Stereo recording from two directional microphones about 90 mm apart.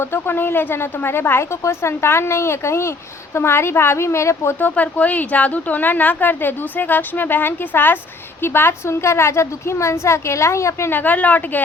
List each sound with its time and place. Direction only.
0.0 s a woman's voice: 25° left (ahead or behind)
4.6 s a woman's voice: 15° left (ahead or behind)